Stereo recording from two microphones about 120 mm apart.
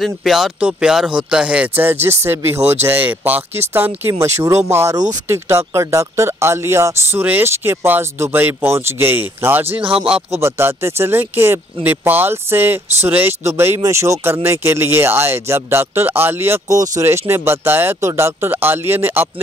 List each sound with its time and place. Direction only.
0.0 s speech: centre (ahead or behind); by 19.2 s 20° right (ahead or behind)